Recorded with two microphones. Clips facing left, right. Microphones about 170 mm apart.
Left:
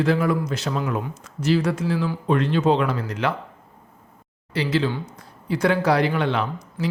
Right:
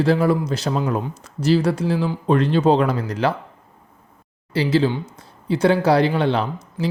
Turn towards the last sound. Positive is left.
turn(degrees=-30)  # may be behind; listen again after turning